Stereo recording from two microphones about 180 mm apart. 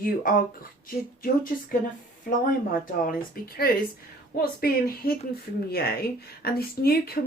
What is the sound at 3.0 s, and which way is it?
Speech, 55° left (ahead or behind).